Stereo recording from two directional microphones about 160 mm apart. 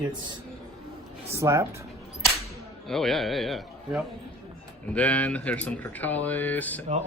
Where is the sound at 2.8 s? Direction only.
Centre (ahead or behind).